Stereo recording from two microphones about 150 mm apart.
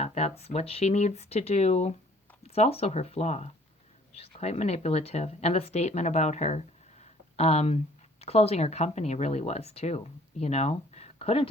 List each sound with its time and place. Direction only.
0.0 s speech: 45° left (ahead or behind)